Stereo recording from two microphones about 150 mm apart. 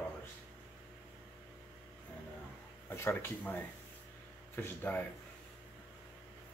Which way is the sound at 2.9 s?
15° left (ahead or behind).